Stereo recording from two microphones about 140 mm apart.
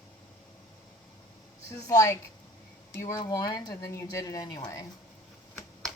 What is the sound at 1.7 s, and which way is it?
Speech, 25° left (ahead or behind).